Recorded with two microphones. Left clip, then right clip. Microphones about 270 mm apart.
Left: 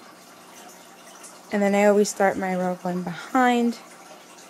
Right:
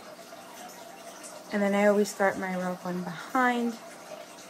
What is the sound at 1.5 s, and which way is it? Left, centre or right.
Speech, left.